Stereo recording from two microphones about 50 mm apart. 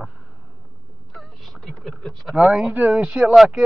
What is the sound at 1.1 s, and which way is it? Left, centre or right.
Boat, centre.